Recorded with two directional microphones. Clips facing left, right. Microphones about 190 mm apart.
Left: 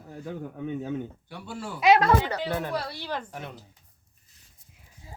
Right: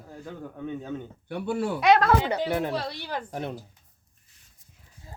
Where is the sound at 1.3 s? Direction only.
60° right (ahead or behind).